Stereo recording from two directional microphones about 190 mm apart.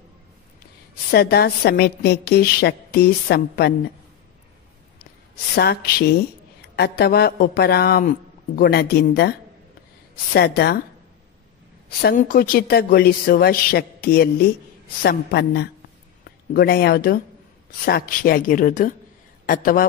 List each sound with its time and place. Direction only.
1.1 s a woman's voice: 55° left (ahead or behind)
5.5 s a woman's voice: 55° left (ahead or behind)
10.3 s a woman's voice: 55° left (ahead or behind)
12.0 s a woman's voice: 50° left (ahead or behind)